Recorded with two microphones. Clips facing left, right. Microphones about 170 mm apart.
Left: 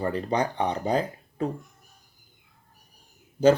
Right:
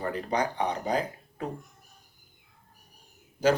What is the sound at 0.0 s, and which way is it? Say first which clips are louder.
Speech: left 3 dB; 25° left (ahead or behind).